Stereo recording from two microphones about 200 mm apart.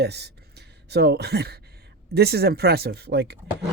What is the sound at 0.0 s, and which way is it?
Speech, 55° right (ahead or behind).